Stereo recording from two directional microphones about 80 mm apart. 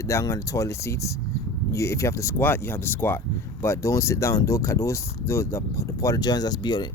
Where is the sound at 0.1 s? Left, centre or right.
Left.